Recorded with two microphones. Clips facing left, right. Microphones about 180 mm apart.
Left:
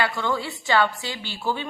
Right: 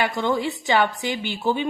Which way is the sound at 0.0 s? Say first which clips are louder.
Right 3 dB; 20° right (ahead or behind).